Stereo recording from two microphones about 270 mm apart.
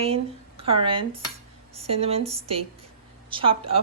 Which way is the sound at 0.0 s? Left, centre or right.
Right.